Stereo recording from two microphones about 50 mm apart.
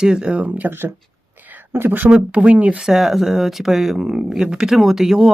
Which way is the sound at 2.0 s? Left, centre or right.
Right.